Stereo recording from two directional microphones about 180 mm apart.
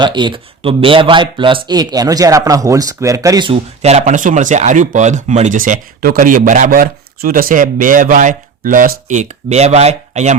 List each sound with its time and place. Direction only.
0.0 s speech: 25° right (ahead or behind)